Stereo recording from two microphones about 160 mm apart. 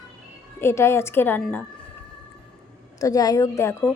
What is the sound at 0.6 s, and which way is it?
A woman's voice, 15° left (ahead or behind).